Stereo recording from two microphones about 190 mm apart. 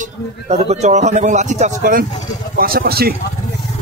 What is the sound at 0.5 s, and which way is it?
A man's voice, 35° right (ahead or behind).